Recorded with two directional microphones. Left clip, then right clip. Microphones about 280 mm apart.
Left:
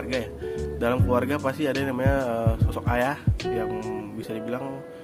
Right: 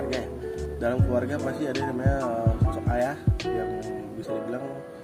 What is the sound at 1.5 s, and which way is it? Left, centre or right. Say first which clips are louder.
Speech: left 4 dB; left.